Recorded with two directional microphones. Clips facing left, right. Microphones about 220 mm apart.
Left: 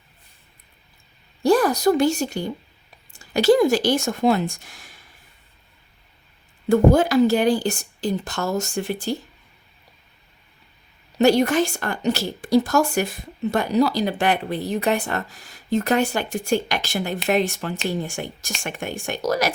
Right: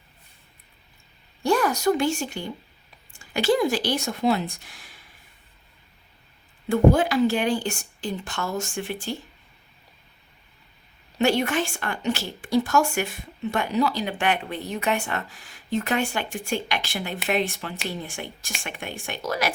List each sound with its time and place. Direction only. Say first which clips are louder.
1.4 s a woman's voice: left 5 dB; 35° left (ahead or behind)
6.7 s a woman's voice: left 3 dB; 40° left (ahead or behind)
11.2 s a woman's voice: left 6 dB; 40° left (ahead or behind)